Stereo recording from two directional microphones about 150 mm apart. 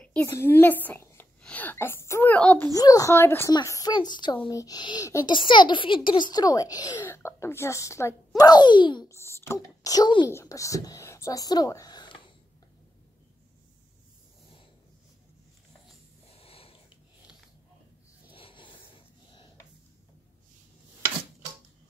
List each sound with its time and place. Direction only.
0.0 s a woman's voice: 10° left (ahead or behind)
2.7 s a woman's voice: 25° left (ahead or behind)
9.1 s a woman's voice: 20° left (ahead or behind)
16.3 s snort: 40° left (ahead or behind)
18.3 s a sound: 35° left (ahead or behind)